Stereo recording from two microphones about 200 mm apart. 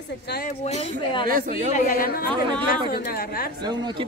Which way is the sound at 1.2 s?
45° right (ahead or behind).